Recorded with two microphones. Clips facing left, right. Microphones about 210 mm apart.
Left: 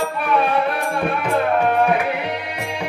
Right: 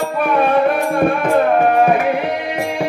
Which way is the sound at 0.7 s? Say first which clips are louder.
Right 7 dB; 45° right (ahead or behind).